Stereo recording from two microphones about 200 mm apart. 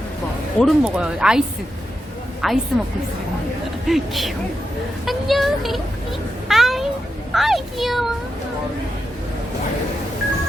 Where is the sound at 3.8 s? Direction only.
Centre (ahead or behind).